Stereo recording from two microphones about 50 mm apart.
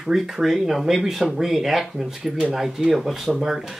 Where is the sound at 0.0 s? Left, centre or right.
Centre.